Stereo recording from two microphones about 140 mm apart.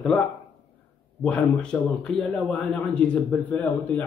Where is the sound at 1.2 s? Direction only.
5° left (ahead or behind).